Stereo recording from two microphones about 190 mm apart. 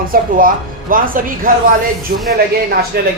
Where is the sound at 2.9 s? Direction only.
55° right (ahead or behind).